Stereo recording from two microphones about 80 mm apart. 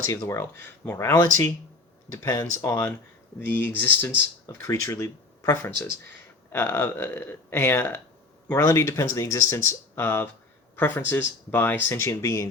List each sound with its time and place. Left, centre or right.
0.0 s speech: left
3.4 s speech: left
4.4 s speech: left
6.5 s speech: left
9.9 s speech: left
12.0 s speech: left